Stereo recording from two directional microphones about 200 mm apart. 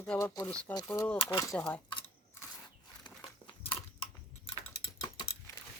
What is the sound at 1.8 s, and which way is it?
Camera, 25° left (ahead or behind).